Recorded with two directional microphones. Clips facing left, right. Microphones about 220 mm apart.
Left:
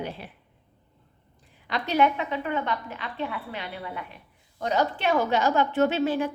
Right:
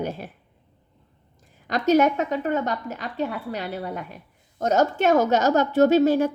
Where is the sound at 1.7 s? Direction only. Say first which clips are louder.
Right 5 dB; 45° right (ahead or behind).